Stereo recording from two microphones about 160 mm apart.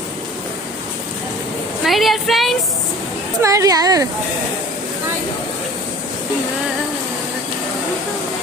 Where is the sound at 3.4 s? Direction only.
20° right (ahead or behind).